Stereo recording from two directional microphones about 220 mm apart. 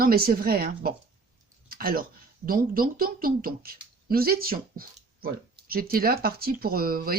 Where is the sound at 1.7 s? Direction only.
40° right (ahead or behind).